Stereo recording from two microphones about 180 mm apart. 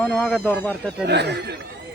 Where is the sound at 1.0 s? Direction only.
70° right (ahead or behind).